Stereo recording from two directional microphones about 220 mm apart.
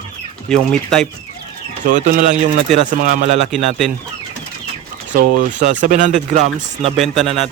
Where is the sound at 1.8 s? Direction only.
35° right (ahead or behind).